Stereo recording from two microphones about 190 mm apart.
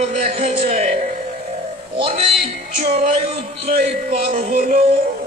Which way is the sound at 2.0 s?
30° right (ahead or behind).